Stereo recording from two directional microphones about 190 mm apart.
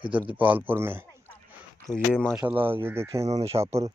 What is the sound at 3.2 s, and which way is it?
Speech, 35° right (ahead or behind).